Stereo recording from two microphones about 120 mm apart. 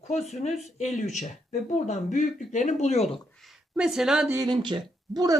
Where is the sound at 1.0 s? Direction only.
85° left; by 3.2 s 60° left (ahead or behind).